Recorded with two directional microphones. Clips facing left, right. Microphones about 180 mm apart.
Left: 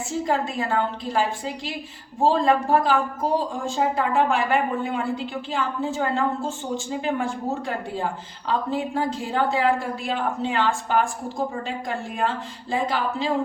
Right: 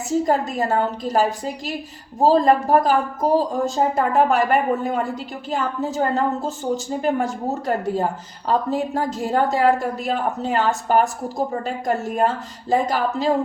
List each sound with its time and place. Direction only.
0.3 s speech: 45° right (ahead or behind)